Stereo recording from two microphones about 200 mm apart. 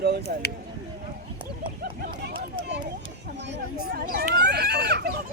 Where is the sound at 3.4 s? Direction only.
55° right (ahead or behind).